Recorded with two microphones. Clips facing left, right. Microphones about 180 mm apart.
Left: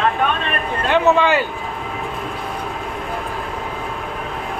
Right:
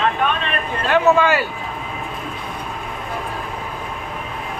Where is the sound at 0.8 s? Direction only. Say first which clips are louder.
Even; 20° left (ahead or behind).